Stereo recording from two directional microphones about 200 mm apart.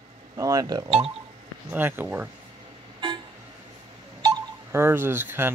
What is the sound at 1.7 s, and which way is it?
Speech, 10° right (ahead or behind).